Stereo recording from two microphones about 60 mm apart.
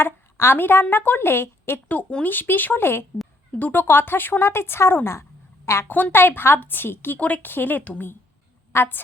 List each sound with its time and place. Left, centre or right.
0.0 s a woman's voice: left
1.9 s speech: left
5.9 s speech: left
7.2 s speech: left
8.7 s a woman's voice: left